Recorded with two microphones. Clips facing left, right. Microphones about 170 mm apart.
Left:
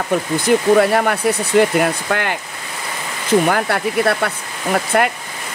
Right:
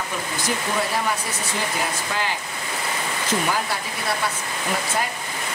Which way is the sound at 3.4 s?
60° left (ahead or behind).